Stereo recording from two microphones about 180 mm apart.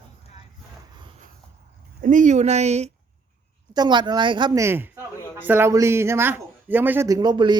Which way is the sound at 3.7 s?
25° right (ahead or behind).